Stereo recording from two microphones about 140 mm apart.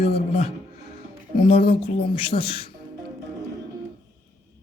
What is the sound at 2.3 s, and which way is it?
Speech, 70° left (ahead or behind).